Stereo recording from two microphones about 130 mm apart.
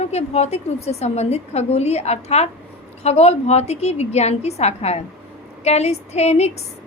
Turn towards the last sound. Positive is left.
turn(degrees=55)  # may be behind; listen again after turning